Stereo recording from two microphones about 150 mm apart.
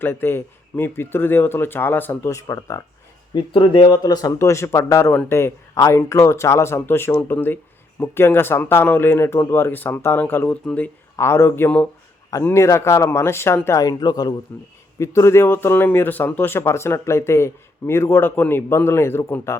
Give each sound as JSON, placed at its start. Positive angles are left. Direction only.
{"t": 0.0, "sound": "speech", "side_deg": 15}
{"t": 3.3, "sound": "speech", "side_deg": 30}